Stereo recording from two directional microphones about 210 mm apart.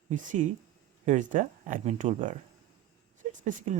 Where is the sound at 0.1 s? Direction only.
35° right (ahead or behind).